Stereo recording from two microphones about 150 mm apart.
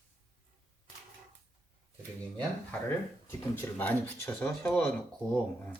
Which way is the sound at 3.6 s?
10° left (ahead or behind).